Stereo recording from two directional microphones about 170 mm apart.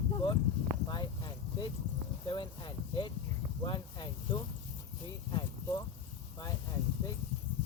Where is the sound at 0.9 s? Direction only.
25° left (ahead or behind).